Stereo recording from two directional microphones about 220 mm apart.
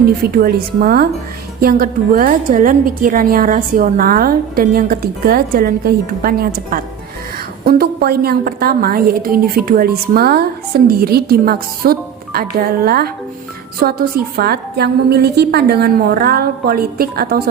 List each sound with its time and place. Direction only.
0.3 s a woman's voice: 40° right (ahead or behind)